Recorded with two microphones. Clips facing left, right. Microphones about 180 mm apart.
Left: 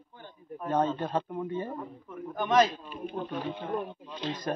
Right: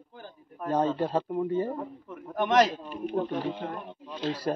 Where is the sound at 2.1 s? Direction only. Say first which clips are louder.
Right 2 dB; 75° right (ahead or behind).